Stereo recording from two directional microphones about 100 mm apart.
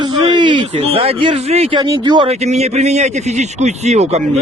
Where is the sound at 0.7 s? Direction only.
80° right.